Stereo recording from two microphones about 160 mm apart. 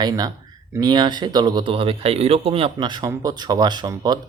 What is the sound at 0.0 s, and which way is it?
Speech, 25° right (ahead or behind).